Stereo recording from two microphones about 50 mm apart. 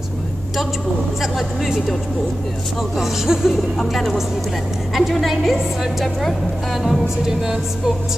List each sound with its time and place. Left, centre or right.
1.2 s a woman's voice: centre
3.0 s a woman's voice: centre